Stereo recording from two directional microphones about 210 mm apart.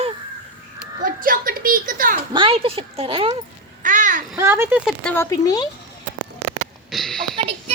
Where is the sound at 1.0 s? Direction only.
40° right (ahead or behind).